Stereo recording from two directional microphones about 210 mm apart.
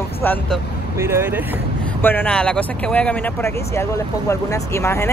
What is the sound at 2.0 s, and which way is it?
Speech, 10° left (ahead or behind).